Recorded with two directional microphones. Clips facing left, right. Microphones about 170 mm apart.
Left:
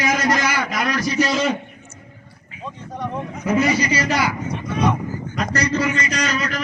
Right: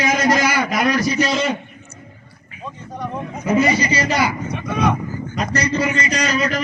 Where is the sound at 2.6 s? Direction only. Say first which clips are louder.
Even; 5° right (ahead or behind).